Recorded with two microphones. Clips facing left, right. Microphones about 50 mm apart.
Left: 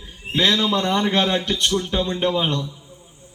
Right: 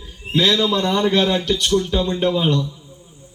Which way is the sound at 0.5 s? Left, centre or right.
Centre.